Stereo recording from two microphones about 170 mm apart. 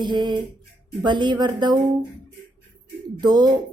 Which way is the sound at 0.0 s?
25° right (ahead or behind).